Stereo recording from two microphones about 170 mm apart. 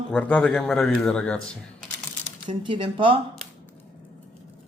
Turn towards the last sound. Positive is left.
turn(degrees=-30)  # may be behind; listen again after turning